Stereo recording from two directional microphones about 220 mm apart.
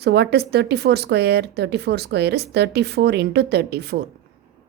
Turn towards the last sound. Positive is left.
turn(degrees=-50)  # may be behind; listen again after turning